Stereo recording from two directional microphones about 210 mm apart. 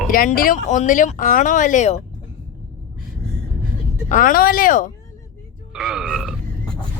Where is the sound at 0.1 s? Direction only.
40° left (ahead or behind).